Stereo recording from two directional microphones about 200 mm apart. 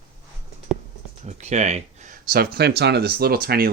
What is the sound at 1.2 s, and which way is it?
Speech, 35° right (ahead or behind).